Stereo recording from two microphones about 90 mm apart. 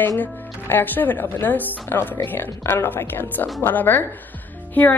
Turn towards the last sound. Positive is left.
turn(degrees=15)  # may be behind; listen again after turning